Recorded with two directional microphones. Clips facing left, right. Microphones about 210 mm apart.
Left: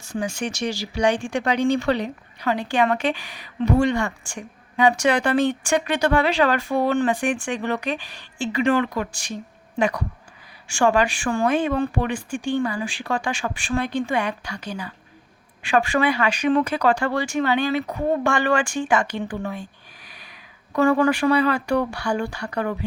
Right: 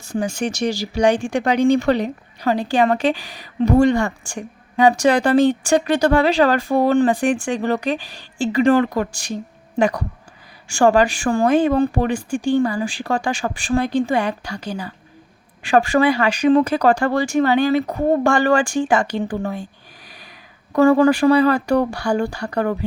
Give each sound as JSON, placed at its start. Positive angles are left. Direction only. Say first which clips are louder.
{"t": 0.1, "sound": "speech", "louder": "right 4 dB", "side_deg": -40}